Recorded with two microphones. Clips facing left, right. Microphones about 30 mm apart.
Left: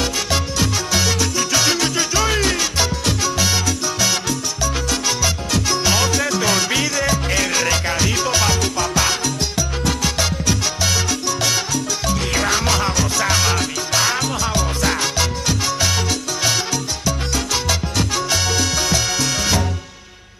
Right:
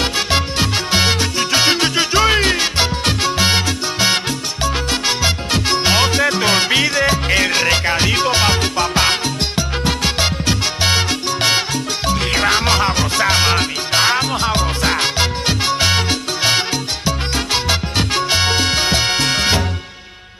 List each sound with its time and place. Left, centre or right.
0.0 s salsa music: right
4.6 s music: right
9.6 s salsa music: right